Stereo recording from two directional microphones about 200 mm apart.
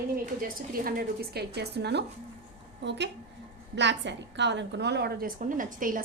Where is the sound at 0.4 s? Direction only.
45° right (ahead or behind).